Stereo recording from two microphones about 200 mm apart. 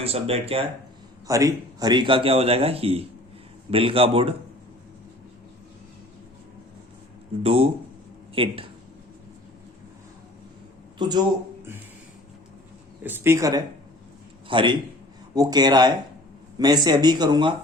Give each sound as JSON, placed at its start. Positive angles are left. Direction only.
{"t": 0.0, "sound": "speech", "side_deg": -30}
{"t": 1.3, "sound": "a man's voice", "side_deg": -15}
{"t": 7.4, "sound": "a man's voice", "side_deg": -30}
{"t": 10.9, "sound": "speech", "side_deg": -20}
{"t": 13.0, "sound": "a man's voice", "side_deg": -10}